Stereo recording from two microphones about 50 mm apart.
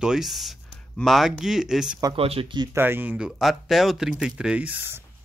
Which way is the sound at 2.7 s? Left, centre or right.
Right.